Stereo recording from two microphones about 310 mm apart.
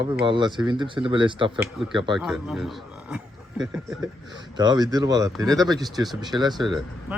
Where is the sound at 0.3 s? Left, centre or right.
Centre.